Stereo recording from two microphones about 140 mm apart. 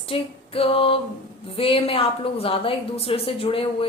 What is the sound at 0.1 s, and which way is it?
Female singing, 40° left (ahead or behind).